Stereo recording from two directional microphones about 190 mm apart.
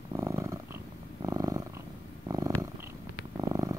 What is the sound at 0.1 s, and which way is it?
Purr, 15° right (ahead or behind).